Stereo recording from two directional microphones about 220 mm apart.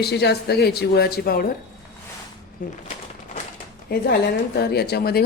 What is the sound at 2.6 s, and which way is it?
Speech, 40° left (ahead or behind).